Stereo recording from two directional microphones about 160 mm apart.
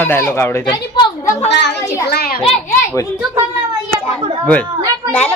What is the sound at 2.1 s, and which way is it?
Speech, 75° left (ahead or behind).